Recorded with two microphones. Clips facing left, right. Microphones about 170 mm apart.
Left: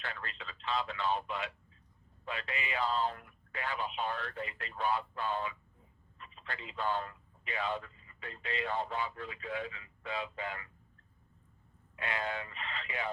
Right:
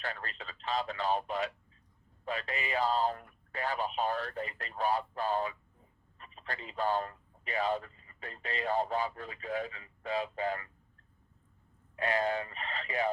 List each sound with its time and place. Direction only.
0.0 s a man's voice: 40° right (ahead or behind)
11.9 s a man's voice: 40° right (ahead or behind)